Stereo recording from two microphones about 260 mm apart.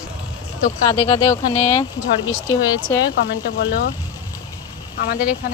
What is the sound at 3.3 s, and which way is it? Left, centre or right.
Speech, left.